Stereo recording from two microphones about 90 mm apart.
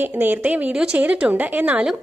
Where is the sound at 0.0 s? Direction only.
20° right (ahead or behind).